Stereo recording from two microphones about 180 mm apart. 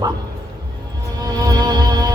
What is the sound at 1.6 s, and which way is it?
Music, 20° right (ahead or behind).